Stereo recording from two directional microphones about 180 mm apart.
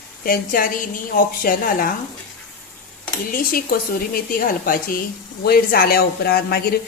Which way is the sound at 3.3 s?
55° left (ahead or behind).